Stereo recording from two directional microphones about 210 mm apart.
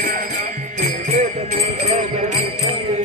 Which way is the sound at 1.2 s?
30° right (ahead or behind).